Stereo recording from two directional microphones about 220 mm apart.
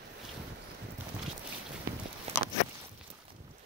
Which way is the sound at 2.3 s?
30° right (ahead or behind).